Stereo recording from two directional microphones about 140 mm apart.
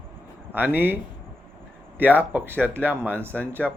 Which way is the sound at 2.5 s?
10° left (ahead or behind).